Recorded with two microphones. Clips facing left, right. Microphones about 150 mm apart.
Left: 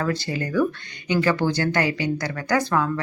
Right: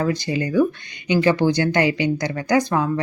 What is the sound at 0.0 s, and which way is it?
Speech, 15° right (ahead or behind).